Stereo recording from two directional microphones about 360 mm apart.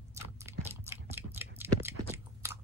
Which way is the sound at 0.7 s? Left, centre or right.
Centre.